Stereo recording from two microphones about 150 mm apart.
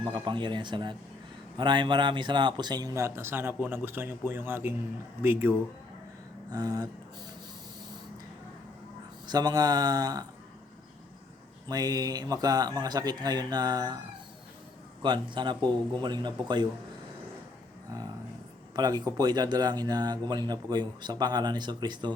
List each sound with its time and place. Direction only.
0.0 s a man's voice: 30° right (ahead or behind)
9.2 s speech: 25° right (ahead or behind)
11.7 s speech: 25° right (ahead or behind)
15.0 s a man's voice: 30° right (ahead or behind)
18.8 s speech: 25° right (ahead or behind)